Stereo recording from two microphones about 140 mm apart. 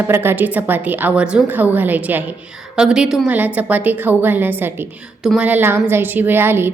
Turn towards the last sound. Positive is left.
turn(degrees=-15)  # may be behind; listen again after turning